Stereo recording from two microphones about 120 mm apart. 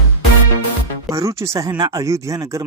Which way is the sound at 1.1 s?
25° right (ahead or behind).